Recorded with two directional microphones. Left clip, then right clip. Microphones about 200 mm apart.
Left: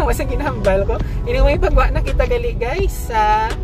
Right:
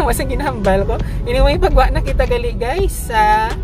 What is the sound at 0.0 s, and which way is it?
A woman's voice, 20° right (ahead or behind).